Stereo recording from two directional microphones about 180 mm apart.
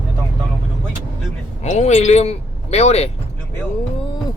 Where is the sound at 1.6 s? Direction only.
40° left (ahead or behind).